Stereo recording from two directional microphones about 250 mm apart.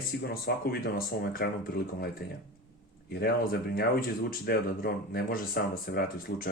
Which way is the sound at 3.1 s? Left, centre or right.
Left.